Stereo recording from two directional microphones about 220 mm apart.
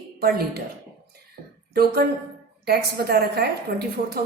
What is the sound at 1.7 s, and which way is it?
A woman's voice, 45° right (ahead or behind).